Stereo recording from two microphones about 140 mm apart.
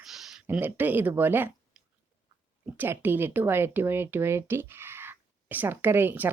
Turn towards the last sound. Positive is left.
turn(degrees=-15)  # may be behind; listen again after turning